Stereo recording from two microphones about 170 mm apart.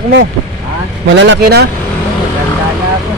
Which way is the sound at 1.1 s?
90° right.